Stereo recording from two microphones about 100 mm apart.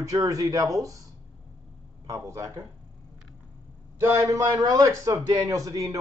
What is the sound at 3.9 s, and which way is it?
A man's voice, 30° right (ahead or behind).